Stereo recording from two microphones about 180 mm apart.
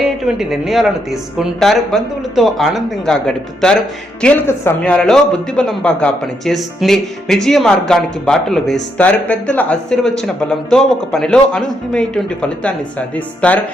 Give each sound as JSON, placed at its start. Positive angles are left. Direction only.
{"t": 0.0, "sound": "speech", "side_deg": 0}